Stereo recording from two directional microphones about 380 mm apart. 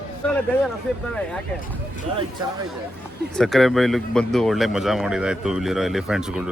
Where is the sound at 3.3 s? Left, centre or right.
Centre.